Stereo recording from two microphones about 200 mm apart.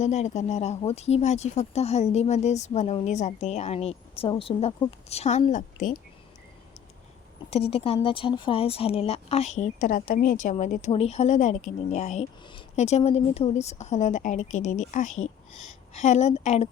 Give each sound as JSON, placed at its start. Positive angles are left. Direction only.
{"t": 0.0, "sound": "speech", "side_deg": 35}
{"t": 7.5, "sound": "speech", "side_deg": 30}